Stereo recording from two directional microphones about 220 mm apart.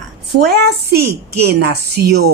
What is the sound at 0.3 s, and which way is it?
A woman's voice, 45° right (ahead or behind).